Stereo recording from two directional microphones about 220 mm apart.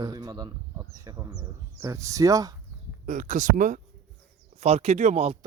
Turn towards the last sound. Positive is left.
turn(degrees=-25)  # may be behind; listen again after turning